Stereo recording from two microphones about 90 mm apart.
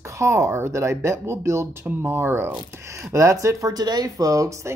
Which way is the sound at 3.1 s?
35° right (ahead or behind).